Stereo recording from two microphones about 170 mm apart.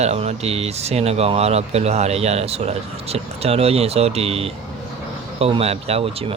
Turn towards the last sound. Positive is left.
turn(degrees=-35)  # may be behind; listen again after turning